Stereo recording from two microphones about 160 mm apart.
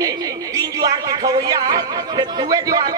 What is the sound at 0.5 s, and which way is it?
Speech, 25° right (ahead or behind).